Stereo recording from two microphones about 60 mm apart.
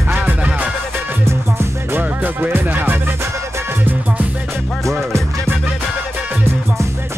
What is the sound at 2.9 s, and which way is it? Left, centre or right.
Music, right.